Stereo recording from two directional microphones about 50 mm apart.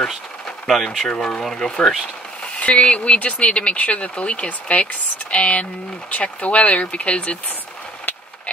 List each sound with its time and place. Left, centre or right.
0.7 s speech: centre
2.4 s speech: left